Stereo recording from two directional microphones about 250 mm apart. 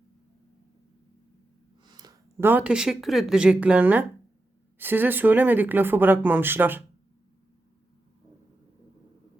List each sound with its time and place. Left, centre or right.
1.8 s speech: centre